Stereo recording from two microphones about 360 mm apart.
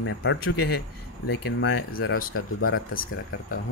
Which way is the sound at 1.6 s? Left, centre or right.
Left.